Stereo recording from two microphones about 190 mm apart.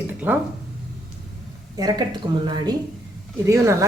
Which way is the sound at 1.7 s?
20° right (ahead or behind).